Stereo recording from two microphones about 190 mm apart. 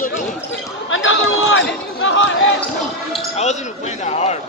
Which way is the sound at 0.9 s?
90° left.